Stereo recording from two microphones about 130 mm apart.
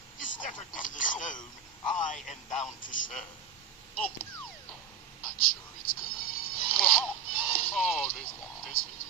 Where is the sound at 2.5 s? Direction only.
65° left (ahead or behind).